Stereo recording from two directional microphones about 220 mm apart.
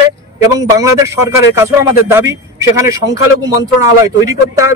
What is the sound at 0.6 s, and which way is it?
A man's voice, 15° right (ahead or behind).